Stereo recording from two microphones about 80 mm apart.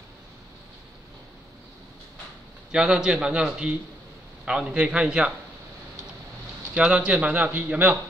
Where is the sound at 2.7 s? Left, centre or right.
Centre.